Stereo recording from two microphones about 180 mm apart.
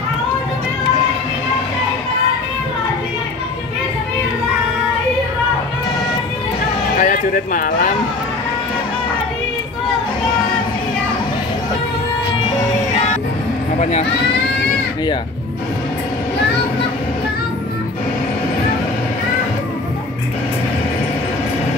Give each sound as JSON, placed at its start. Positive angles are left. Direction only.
{"t": 7.0, "sound": "speech", "side_deg": 50}